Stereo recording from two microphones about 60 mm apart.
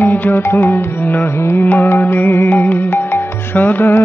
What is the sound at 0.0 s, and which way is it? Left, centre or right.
Music, left.